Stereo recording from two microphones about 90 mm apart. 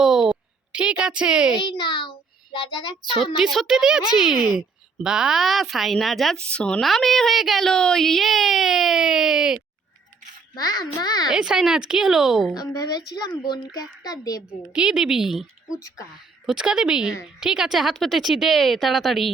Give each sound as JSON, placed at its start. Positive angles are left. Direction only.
{"t": 0.0, "sound": "a sound", "side_deg": -5}
{"t": 1.5, "sound": "a child's voice", "side_deg": 65}
{"t": 3.3, "sound": "speech", "side_deg": 0}
{"t": 10.5, "sound": "a child's voice", "side_deg": 45}
{"t": 11.3, "sound": "speech", "side_deg": -5}
{"t": 12.5, "sound": "a child's voice", "side_deg": 45}
{"t": 14.7, "sound": "speech", "side_deg": -10}